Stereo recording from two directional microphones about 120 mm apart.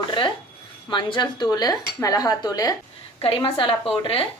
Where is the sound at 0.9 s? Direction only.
40° left (ahead or behind).